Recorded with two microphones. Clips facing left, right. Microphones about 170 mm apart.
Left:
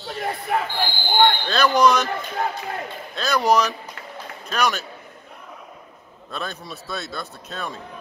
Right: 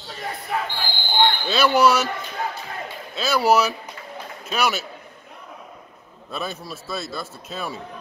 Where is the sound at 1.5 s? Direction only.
5° right (ahead or behind).